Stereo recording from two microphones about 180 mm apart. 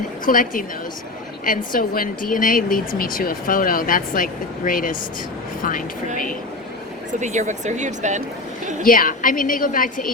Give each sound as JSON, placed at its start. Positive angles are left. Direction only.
{"t": 0.3, "sound": "speech", "side_deg": 50}
{"t": 7.1, "sound": "speech", "side_deg": -40}
{"t": 8.8, "sound": "speech", "side_deg": 50}